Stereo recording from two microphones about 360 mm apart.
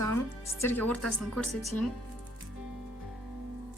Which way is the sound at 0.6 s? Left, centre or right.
Centre.